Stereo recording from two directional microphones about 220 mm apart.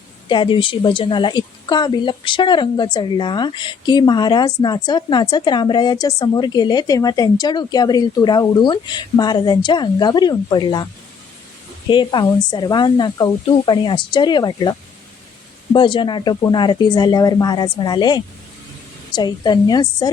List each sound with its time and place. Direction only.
0.3 s a woman's voice: 20° left (ahead or behind)
11.9 s a woman's voice: 20° left (ahead or behind)